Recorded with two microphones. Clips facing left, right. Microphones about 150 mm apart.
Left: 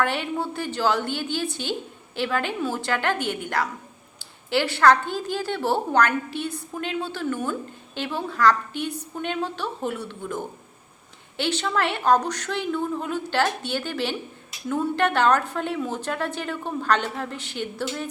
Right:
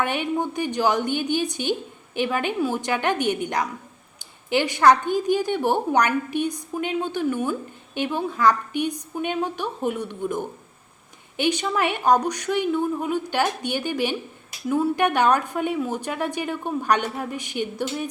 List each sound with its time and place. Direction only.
0.0 s a woman's voice: 15° right (ahead or behind)